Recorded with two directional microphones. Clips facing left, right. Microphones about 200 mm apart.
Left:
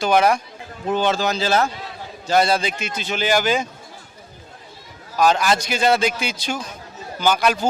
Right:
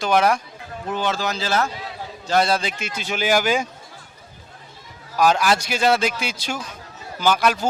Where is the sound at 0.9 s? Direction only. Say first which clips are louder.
Left 4 dB; 25° left (ahead or behind).